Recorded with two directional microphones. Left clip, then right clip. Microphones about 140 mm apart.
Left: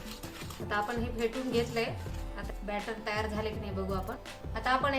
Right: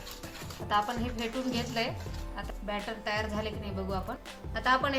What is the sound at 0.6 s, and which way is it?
Speech, 20° right (ahead or behind).